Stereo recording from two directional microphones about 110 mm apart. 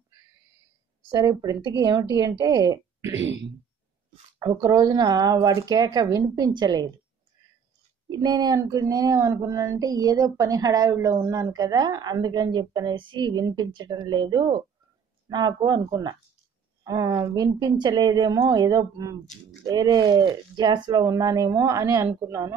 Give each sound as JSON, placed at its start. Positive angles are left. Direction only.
{"t": 1.1, "sound": "speech", "side_deg": -35}
{"t": 4.4, "sound": "speech", "side_deg": -35}
{"t": 8.1, "sound": "speech", "side_deg": -40}